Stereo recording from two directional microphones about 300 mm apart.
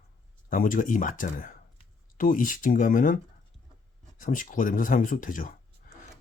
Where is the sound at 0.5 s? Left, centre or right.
Left.